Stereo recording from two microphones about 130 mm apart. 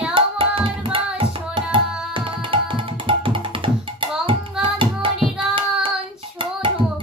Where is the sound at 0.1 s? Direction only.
45° right (ahead or behind).